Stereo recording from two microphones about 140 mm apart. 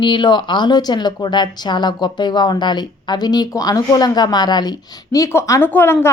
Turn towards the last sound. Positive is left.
turn(degrees=15)  # may be behind; listen again after turning